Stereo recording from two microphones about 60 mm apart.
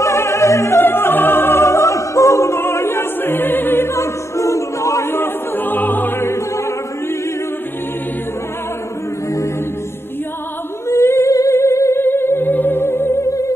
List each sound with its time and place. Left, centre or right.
0.0 s opera: left
0.7 s music: left
2.6 s music: left
3.9 s music: left
5.0 s music: left
10.9 s humming: left
12.0 s music: left